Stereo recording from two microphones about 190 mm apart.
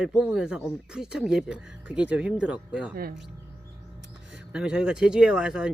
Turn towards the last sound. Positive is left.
turn(degrees=-5)  # may be behind; listen again after turning